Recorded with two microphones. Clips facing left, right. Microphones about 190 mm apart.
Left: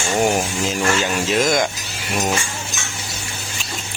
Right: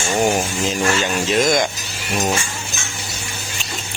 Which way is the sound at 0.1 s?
Centre (ahead or behind).